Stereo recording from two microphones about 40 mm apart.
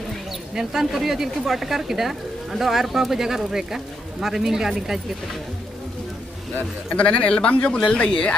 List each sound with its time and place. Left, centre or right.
0.6 s a woman's voice: centre
6.9 s speech: left
7.2 s speech: left